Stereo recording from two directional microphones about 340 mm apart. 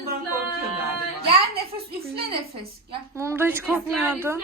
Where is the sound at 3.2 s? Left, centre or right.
Centre.